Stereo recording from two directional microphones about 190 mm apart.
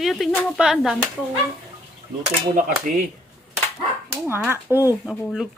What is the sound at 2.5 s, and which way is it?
Speech, 45° right (ahead or behind).